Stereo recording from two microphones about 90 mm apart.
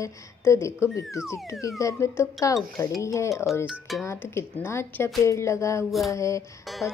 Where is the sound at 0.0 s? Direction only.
35° left (ahead or behind).